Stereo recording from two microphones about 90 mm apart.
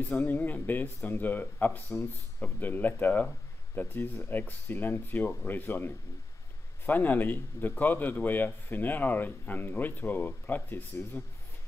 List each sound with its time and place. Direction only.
0.1 s a man's voice: 20° left (ahead or behind)